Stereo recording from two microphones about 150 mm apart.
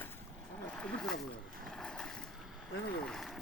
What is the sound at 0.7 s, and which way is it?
Boat, 5° left (ahead or behind).